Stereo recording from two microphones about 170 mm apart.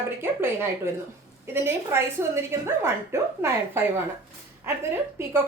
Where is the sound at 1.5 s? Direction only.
15° right (ahead or behind).